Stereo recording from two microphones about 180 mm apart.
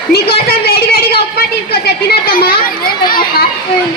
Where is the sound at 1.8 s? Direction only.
55° left (ahead or behind).